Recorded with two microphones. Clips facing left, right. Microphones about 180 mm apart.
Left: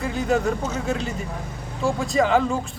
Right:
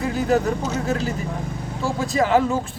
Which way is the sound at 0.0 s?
Centre (ahead or behind).